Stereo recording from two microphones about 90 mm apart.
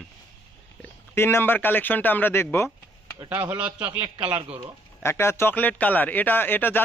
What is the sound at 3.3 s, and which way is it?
A man's voice, 15° right (ahead or behind).